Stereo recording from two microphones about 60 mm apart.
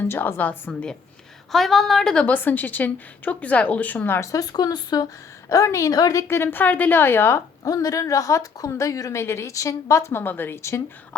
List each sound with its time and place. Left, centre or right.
0.0 s a woman's voice: left
0.3 s a woman's voice: left
1.5 s a woman's voice: centre
2.1 s a woman's voice: left
4.2 s a woman's voice: left
5.7 s a woman's voice: left
6.2 s a woman's voice: left
7.6 s a woman's voice: left
10.1 s a woman's voice: left
10.6 s speech: left